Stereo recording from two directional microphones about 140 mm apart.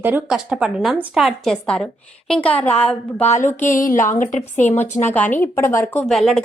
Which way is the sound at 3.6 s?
70° left (ahead or behind).